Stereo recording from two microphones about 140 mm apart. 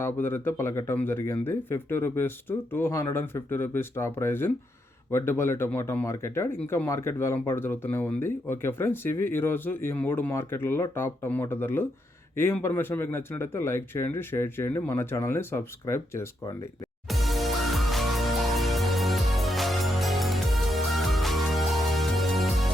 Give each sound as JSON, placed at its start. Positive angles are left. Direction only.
{"t": 0.0, "sound": "speech", "side_deg": 15}
{"t": 17.1, "sound": "music", "side_deg": 0}